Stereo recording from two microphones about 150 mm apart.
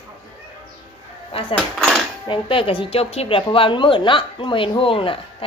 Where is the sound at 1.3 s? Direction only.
35° left (ahead or behind).